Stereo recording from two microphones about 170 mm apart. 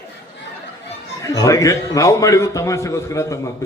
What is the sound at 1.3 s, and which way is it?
A man's voice, 20° left (ahead or behind).